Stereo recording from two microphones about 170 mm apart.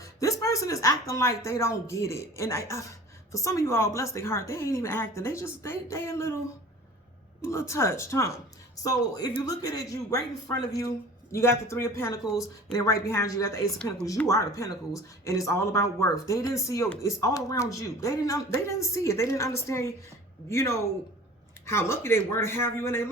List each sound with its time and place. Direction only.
0.0 s a woman's voice: 20° left (ahead or behind)
7.4 s a woman's voice: 15° left (ahead or behind)